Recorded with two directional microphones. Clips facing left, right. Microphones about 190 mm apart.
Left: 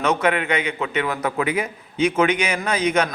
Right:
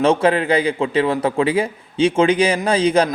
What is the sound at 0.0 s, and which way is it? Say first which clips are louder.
A man's voice: right 5 dB; 30° right (ahead or behind).